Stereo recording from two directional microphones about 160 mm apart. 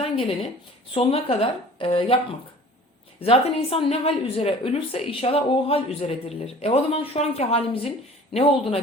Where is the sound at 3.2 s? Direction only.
40° left (ahead or behind).